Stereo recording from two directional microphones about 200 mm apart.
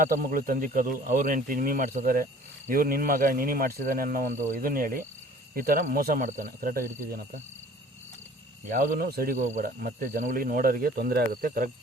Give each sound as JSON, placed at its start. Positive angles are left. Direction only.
{"t": 0.0, "sound": "speech", "side_deg": -45}
{"t": 8.7, "sound": "speech", "side_deg": -45}